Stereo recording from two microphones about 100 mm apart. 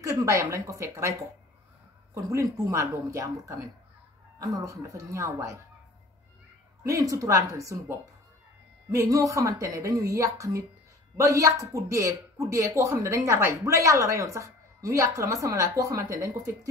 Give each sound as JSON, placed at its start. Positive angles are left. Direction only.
{"t": 0.0, "sound": "a woman's voice", "side_deg": -30}
{"t": 2.2, "sound": "speech", "side_deg": -30}
{"t": 6.8, "sound": "speech", "side_deg": -35}
{"t": 8.9, "sound": "speech", "side_deg": -35}